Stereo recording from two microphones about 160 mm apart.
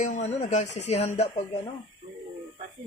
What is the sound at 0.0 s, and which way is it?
Speech, 45° left (ahead or behind).